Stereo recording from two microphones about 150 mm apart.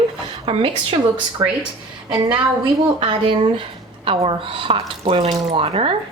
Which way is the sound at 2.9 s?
35° right (ahead or behind).